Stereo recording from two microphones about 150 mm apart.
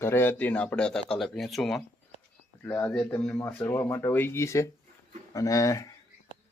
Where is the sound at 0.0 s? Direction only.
15° left (ahead or behind).